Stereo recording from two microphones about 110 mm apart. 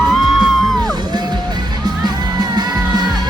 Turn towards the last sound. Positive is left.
turn(degrees=-40)  # may be behind; listen again after turning